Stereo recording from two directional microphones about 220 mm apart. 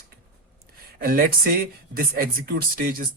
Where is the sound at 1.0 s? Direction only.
40° right (ahead or behind).